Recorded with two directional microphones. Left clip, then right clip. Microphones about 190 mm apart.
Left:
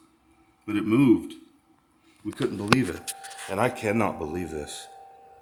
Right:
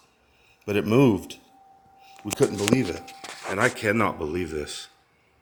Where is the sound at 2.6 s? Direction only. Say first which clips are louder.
Even; 5° right (ahead or behind).